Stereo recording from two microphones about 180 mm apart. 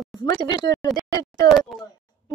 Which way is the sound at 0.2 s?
20° left (ahead or behind).